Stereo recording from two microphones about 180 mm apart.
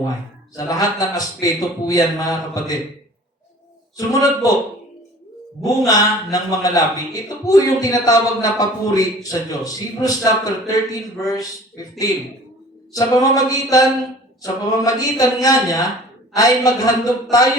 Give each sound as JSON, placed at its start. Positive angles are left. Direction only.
{"t": 0.5, "sound": "speech", "side_deg": 20}
{"t": 3.9, "sound": "speech", "side_deg": 20}
{"t": 5.9, "sound": "speech", "side_deg": 20}